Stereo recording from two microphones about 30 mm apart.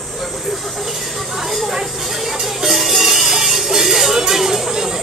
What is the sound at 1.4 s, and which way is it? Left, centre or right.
Music, centre.